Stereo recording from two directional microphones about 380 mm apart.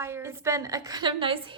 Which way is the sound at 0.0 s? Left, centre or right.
Centre.